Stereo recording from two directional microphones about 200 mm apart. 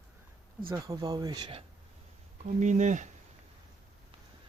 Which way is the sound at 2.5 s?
35° right (ahead or behind).